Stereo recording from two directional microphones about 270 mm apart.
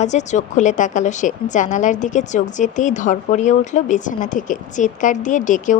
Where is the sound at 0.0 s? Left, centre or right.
Left.